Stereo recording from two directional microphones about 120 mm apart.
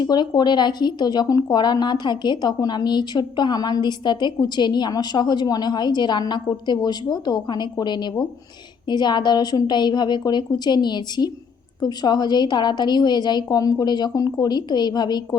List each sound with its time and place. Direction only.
0.0 s speech: 35° left (ahead or behind)